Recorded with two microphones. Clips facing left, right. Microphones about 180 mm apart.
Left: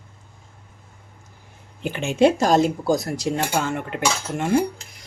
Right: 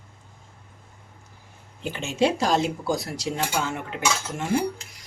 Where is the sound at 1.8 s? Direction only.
60° left (ahead or behind).